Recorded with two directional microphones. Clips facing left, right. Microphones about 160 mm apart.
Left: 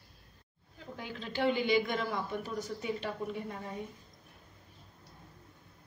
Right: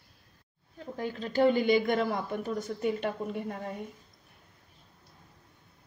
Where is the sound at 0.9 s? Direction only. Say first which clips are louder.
Right 8 dB; 45° right (ahead or behind).